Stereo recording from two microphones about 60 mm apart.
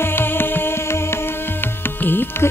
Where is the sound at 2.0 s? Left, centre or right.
Left.